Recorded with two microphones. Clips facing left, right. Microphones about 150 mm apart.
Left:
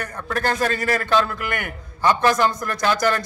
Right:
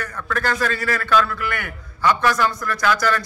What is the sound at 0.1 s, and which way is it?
A man's voice, 30° left (ahead or behind).